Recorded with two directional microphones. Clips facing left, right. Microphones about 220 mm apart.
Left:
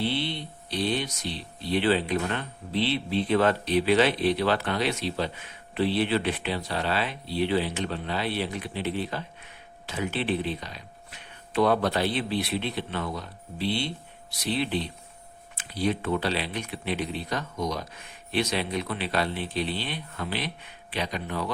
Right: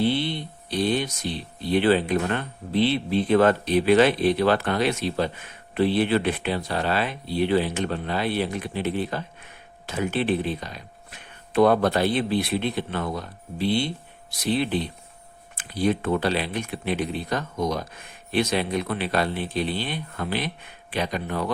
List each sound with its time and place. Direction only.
0.0 s speech: 50° right (ahead or behind)